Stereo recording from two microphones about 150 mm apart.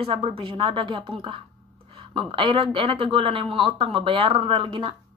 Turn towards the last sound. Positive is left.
turn(degrees=-35)  # may be behind; listen again after turning